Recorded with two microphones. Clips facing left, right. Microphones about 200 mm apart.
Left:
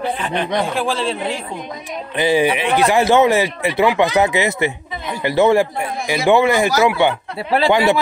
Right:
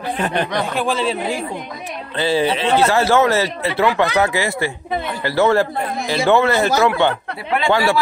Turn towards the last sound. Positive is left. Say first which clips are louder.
# left 2 dB
turn(degrees=20)  # may be behind; listen again after turning